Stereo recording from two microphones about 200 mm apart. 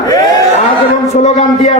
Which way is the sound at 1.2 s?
35° left (ahead or behind).